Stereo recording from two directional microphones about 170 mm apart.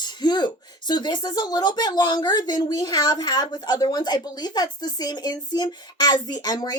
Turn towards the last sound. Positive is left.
turn(degrees=25)  # may be behind; listen again after turning